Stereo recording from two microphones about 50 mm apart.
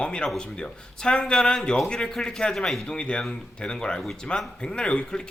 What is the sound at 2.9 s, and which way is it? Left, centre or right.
Speech, centre.